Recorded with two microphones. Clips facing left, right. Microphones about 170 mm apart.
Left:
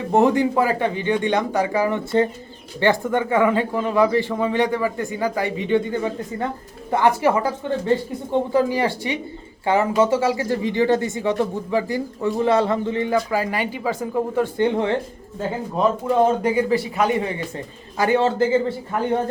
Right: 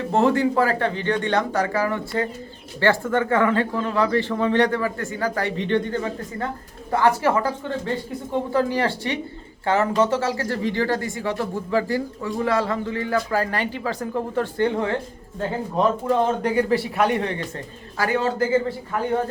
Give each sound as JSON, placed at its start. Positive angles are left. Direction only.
{"t": 0.1, "sound": "speech", "side_deg": 15}
{"t": 16.0, "sound": "speech", "side_deg": 5}
{"t": 17.9, "sound": "a man's voice", "side_deg": 25}